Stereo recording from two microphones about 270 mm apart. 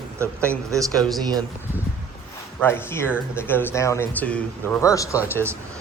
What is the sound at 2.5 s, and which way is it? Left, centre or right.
Speech, centre.